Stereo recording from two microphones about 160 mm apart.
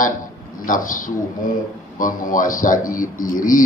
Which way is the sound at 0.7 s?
55° left (ahead or behind).